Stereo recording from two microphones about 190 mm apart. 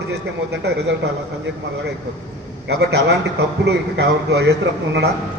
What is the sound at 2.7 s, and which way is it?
A man's voice, 60° right (ahead or behind).